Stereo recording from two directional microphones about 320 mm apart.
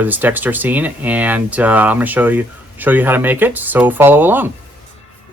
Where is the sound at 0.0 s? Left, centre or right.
Centre.